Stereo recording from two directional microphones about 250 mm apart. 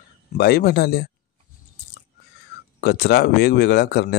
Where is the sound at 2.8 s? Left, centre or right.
Left.